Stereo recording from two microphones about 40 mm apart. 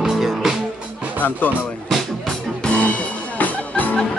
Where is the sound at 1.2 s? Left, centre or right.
Left.